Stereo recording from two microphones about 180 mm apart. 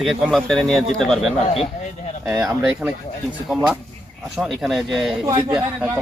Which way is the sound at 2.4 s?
5° right (ahead or behind).